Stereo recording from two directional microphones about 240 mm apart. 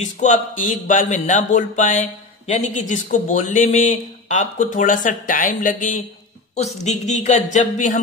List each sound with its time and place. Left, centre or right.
0.0 s speech: left